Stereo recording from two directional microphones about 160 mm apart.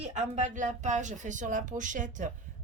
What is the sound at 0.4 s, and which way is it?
Speech, 50° right (ahead or behind).